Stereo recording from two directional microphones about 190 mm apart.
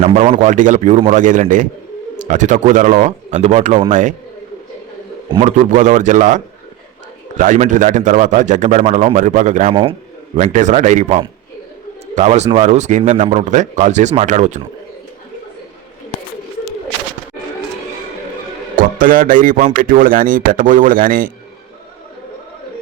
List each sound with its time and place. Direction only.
0.0 s a man's voice: 35° right (ahead or behind)
5.3 s a man's voice: 35° right (ahead or behind)
18.8 s speech: 45° right (ahead or behind)